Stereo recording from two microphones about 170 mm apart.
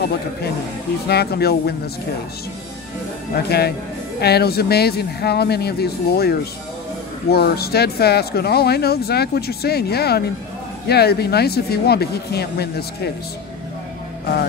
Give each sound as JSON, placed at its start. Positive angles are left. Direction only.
{"t": 1.0, "sound": "speech", "side_deg": 70}
{"t": 3.4, "sound": "speech", "side_deg": 70}